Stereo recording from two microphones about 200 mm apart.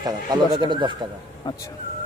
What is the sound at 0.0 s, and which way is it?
Speech, 20° right (ahead or behind).